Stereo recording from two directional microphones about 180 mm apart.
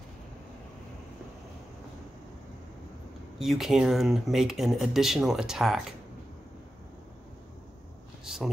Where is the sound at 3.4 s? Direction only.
Centre (ahead or behind).